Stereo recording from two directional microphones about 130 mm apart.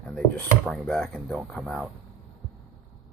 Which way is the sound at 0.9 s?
5° left (ahead or behind).